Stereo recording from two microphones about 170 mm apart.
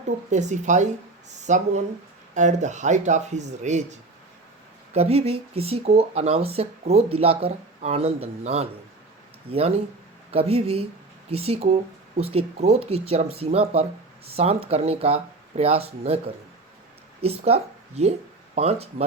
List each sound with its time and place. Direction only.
0.3 s speech: 45° right (ahead or behind)
4.9 s speech: 35° right (ahead or behind)